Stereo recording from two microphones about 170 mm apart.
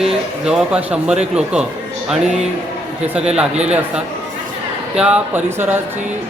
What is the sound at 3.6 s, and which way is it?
Speech, 5° right (ahead or behind).